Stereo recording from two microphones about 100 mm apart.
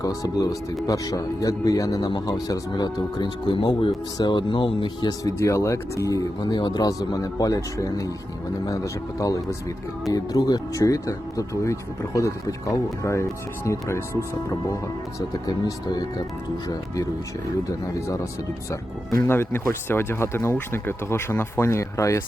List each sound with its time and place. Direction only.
0.0 s speech: 35° left (ahead or behind); by 5.1 s 55° left (ahead or behind)
5.2 s speech: 30° left (ahead or behind)
19.3 s speech: 25° left (ahead or behind)